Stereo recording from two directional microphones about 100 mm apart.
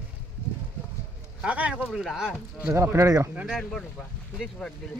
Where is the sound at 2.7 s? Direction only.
30° right (ahead or behind).